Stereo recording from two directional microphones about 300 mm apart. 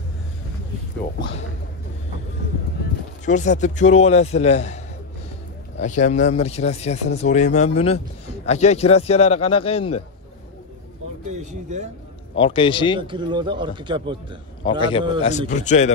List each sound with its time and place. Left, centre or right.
3.3 s a man's voice: left
5.8 s a man's voice: left
11.7 s a man's voice: right
12.4 s a man's voice: centre
13.0 s speech: centre
14.6 s a man's voice: centre